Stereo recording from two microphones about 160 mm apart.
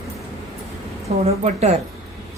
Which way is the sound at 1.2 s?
40° right (ahead or behind).